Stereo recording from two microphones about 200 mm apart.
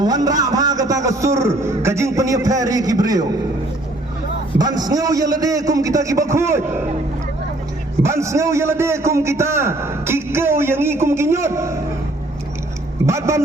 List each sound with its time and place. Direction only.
0.0 s a man's voice: 20° right (ahead or behind)
4.5 s a man's voice: 20° right (ahead or behind)
8.0 s a man's voice: 15° right (ahead or behind)
13.1 s a man's voice: 15° right (ahead or behind)